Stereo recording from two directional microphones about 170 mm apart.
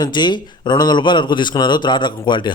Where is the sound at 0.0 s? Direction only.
25° left (ahead or behind).